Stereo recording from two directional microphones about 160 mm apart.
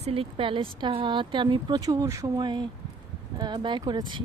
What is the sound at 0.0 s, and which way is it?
Speech, 35° right (ahead or behind).